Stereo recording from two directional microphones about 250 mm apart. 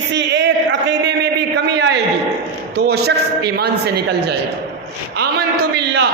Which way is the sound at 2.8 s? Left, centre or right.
Right.